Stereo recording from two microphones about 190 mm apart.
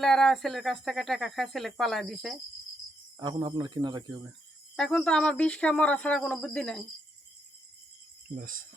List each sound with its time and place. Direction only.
0.0 s speech: centre (ahead or behind)
3.2 s speech: 20° right (ahead or behind)
4.8 s speech: 5° left (ahead or behind)
8.4 s speech: 45° right (ahead or behind)